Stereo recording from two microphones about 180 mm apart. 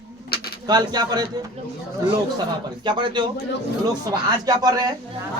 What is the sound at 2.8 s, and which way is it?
A man's voice, 25° right (ahead or behind).